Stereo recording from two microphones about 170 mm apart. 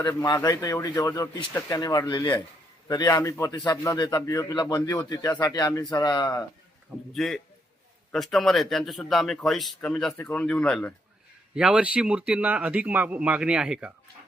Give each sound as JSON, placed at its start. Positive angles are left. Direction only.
{"t": 0.0, "sound": "speech", "side_deg": 20}
{"t": 7.1, "sound": "speech", "side_deg": 0}
{"t": 11.5, "sound": "speech", "side_deg": -5}